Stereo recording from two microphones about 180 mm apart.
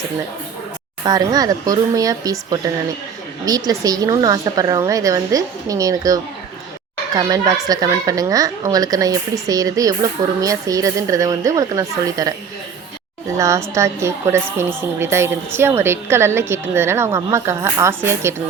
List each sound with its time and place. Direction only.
1.0 s a woman's voice: 20° right (ahead or behind)
13.3 s a woman's voice: 15° right (ahead or behind)